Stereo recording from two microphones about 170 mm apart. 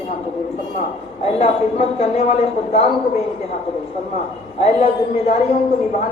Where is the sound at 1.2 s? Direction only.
40° left (ahead or behind).